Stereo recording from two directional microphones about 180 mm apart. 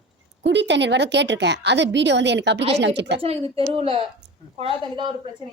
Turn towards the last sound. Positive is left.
turn(degrees=-30)  # may be behind; listen again after turning